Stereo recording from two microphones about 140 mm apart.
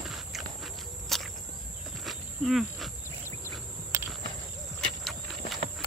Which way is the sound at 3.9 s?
20° right (ahead or behind).